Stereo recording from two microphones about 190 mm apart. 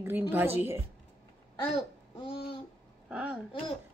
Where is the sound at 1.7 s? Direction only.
30° left (ahead or behind).